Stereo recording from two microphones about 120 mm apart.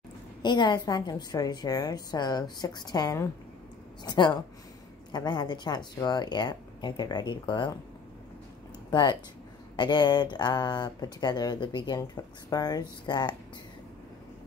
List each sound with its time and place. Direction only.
0.4 s speech: 40° left (ahead or behind)
8.9 s speech: 40° left (ahead or behind)